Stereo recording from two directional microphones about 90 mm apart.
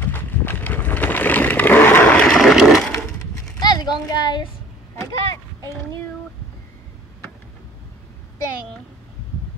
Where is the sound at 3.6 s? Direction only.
50° left (ahead or behind).